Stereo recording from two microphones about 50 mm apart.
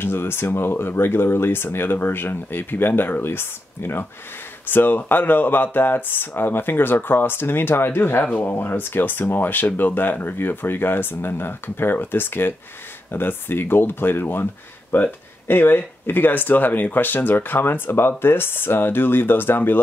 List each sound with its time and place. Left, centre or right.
0.0 s speech: left